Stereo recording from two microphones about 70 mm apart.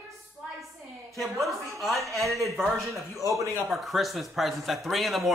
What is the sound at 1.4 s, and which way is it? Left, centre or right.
A woman's voice, centre.